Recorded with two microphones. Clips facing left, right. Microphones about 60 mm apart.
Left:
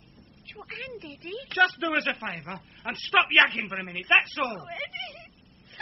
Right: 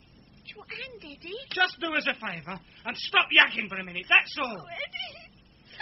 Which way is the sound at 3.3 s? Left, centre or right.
Left.